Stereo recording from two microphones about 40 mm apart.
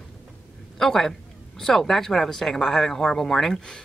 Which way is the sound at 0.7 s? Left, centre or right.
Centre.